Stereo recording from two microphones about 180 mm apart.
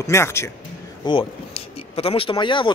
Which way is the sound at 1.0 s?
30° left (ahead or behind).